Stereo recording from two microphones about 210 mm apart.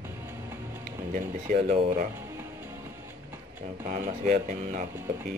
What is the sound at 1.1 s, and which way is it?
Speech, 40° right (ahead or behind).